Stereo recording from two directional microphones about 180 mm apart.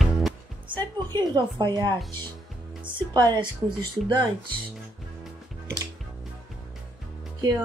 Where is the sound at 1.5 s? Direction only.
25° right (ahead or behind).